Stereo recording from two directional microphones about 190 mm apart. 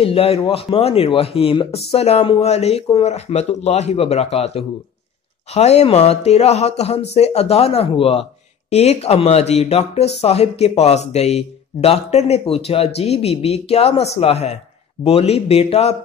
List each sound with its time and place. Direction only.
0.0 s speech: 30° left (ahead or behind)